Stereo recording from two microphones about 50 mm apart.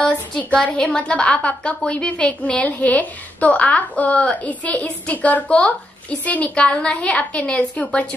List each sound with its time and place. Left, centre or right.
0.7 s a woman's voice: left